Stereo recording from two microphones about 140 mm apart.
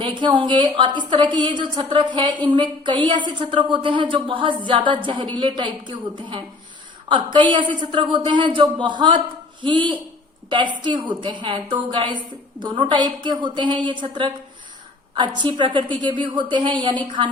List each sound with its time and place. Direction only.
0.0 s a woman's voice: 35° right (ahead or behind)